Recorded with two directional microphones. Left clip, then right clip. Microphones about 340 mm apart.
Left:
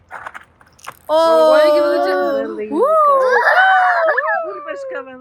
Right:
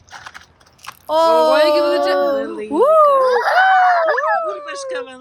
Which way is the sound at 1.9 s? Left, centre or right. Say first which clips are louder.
Even; right.